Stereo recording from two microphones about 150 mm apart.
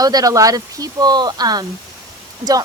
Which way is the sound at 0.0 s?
25° right (ahead or behind).